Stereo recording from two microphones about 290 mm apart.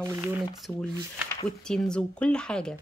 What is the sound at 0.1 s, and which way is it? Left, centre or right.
Speech, centre.